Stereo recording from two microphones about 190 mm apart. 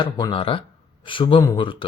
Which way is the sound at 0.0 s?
25° left (ahead or behind).